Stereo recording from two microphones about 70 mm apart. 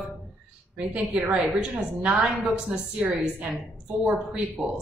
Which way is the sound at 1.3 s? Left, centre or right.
Centre.